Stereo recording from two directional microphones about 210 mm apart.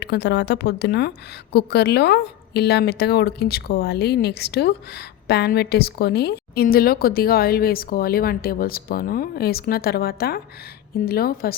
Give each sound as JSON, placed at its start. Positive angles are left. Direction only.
{"t": 0.0, "sound": "a woman's voice", "side_deg": 55}